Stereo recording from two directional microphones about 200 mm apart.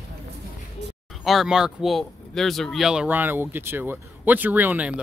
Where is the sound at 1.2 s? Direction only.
Centre (ahead or behind).